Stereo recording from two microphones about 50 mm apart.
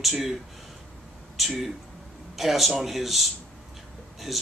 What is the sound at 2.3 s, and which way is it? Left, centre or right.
Speech, centre.